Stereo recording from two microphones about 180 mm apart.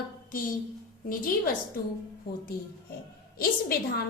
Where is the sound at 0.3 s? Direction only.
50° left (ahead or behind).